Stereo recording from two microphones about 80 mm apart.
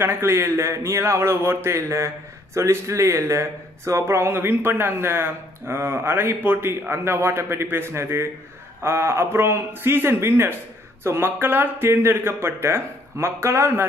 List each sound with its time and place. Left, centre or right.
0.0 s a man's voice: right